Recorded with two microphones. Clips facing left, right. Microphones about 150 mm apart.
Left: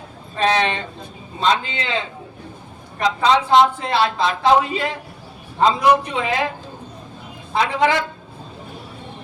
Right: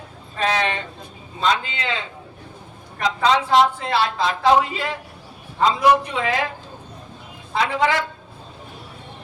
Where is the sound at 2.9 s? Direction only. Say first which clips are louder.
Left 2 dB; 20° left (ahead or behind).